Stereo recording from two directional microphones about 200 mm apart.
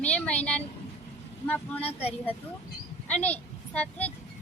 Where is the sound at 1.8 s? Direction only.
30° left (ahead or behind).